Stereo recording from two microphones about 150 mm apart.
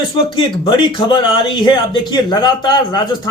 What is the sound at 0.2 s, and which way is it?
Speech, 35° left (ahead or behind).